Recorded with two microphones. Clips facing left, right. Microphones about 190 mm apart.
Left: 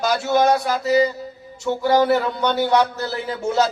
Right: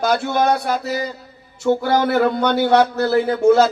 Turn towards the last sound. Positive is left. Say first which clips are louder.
# right 7 dB
turn(degrees=-55)  # may be behind; listen again after turning